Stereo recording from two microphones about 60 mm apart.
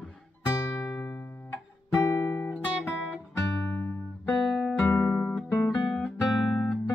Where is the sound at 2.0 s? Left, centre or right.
Left.